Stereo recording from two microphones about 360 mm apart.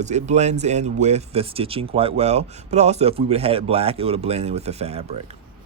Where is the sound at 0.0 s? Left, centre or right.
Centre.